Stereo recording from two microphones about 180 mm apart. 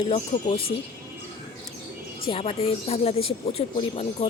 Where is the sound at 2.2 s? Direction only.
30° left (ahead or behind).